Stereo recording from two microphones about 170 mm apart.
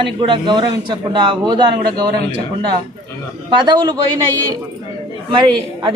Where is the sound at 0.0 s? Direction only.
30° right (ahead or behind).